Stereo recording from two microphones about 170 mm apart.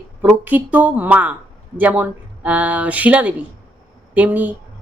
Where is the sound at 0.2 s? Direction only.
10° right (ahead or behind).